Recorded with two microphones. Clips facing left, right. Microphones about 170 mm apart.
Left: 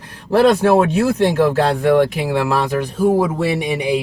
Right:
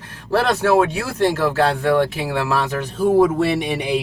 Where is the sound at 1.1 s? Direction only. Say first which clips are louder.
Right 2 dB; 15° left (ahead or behind).